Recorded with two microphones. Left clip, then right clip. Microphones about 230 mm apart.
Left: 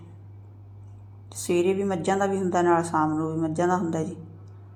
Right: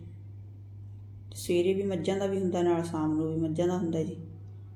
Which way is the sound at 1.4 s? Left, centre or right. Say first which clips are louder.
Left 4 dB; left.